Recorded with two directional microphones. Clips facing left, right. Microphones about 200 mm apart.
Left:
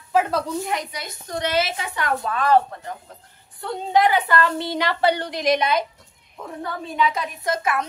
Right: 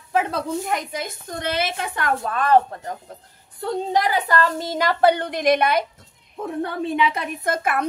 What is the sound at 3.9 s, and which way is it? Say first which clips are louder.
Speech: left 4 dB; 40° right (ahead or behind).